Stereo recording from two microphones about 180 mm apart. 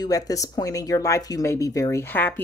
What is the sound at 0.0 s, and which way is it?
Speech, 20° left (ahead or behind).